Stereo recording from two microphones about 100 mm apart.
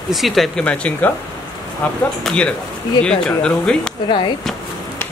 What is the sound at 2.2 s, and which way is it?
A man's voice, 10° left (ahead or behind).